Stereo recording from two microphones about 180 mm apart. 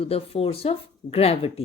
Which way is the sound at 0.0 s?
35° left (ahead or behind).